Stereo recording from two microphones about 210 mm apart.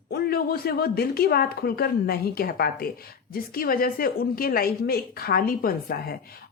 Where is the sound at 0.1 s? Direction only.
45° left (ahead or behind).